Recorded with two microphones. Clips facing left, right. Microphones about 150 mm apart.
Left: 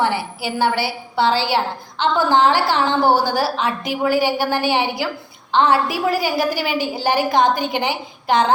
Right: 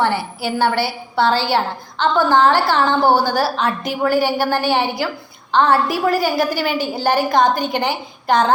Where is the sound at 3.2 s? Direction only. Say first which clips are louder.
Right 1 dB; 15° left (ahead or behind).